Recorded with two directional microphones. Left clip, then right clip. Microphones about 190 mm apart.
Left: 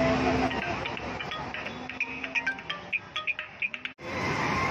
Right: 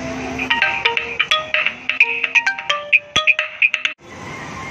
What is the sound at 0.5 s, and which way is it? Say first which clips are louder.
Music: right 15 dB; 50° right (ahead or behind).